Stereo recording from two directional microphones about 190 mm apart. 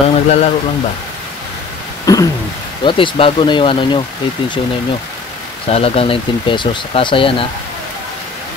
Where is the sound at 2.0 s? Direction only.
20° left (ahead or behind).